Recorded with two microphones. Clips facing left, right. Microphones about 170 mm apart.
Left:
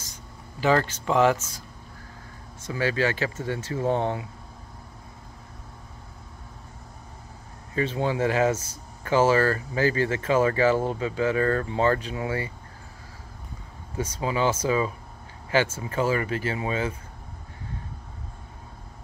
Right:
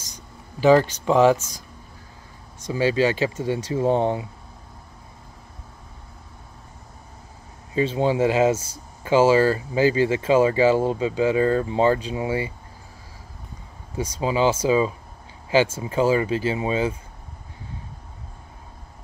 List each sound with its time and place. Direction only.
0.1 s speech: 15° right (ahead or behind)
2.6 s speech: 20° right (ahead or behind)
7.7 s speech: 20° right (ahead or behind)
13.9 s speech: 15° right (ahead or behind)